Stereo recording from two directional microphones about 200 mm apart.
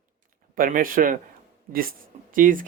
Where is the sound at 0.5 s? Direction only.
45° right (ahead or behind).